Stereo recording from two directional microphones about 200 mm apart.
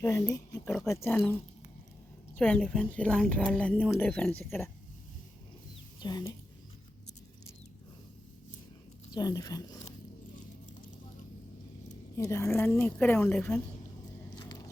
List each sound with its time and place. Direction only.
0.0 s a woman's voice: 15° left (ahead or behind)
2.4 s a woman's voice: 5° left (ahead or behind)
6.0 s speech: 20° left (ahead or behind)
9.1 s speech: 20° left (ahead or behind)
12.1 s a woman's voice: 15° left (ahead or behind)